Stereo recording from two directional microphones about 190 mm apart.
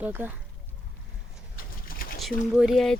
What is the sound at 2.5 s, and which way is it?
Speech, centre (ahead or behind).